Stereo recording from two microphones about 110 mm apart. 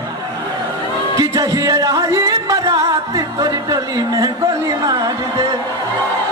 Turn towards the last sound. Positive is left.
turn(degrees=-35)  # may be behind; listen again after turning